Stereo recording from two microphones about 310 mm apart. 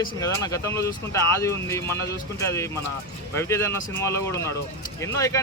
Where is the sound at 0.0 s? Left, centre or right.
Centre.